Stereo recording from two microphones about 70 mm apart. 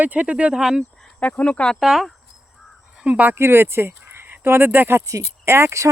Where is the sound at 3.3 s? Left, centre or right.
Right.